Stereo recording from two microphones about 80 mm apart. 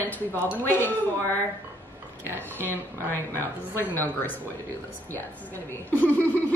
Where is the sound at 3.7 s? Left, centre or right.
Left.